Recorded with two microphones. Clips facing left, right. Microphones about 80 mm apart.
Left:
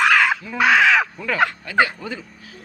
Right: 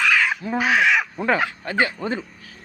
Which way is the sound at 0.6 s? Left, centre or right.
Left.